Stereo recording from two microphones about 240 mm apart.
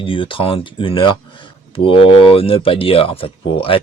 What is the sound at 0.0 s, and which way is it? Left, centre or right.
Speech, left.